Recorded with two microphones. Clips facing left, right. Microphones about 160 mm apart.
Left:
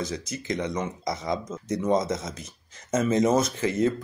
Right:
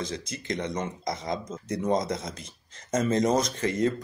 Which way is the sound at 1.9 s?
5° left (ahead or behind).